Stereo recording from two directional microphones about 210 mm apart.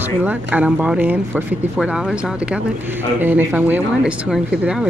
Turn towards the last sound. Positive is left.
turn(degrees=-5)  # may be behind; listen again after turning